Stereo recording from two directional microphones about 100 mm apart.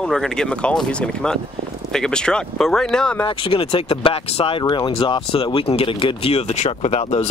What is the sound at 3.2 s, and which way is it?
Speech, 65° left (ahead or behind).